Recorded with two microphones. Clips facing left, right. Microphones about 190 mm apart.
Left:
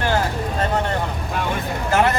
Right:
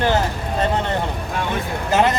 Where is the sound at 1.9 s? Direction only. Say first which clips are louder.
Right 1 dB; 20° right (ahead or behind).